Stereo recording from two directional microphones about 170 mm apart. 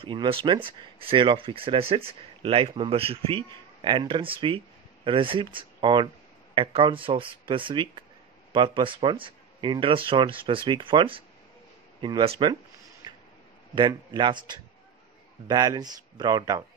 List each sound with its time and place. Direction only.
0.0 s speech: 30° right (ahead or behind)
13.0 s a sound: 25° right (ahead or behind)
13.7 s speech: 30° right (ahead or behind)